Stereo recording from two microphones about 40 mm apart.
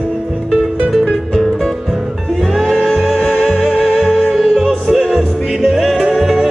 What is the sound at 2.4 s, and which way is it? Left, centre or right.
Music, centre.